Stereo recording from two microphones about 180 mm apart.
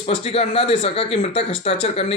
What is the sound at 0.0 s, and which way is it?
Speech, 30° left (ahead or behind).